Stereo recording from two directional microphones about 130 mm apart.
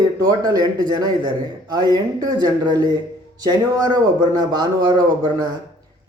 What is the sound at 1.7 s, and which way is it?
Speech, 30° right (ahead or behind).